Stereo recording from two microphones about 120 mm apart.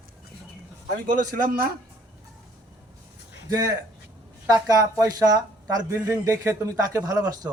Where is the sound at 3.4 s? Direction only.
30° right (ahead or behind).